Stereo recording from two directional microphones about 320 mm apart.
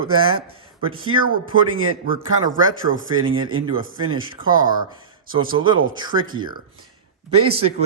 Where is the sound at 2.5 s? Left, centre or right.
Right.